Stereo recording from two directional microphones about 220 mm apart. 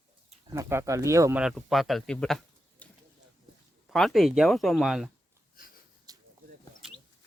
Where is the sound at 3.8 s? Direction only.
Centre (ahead or behind).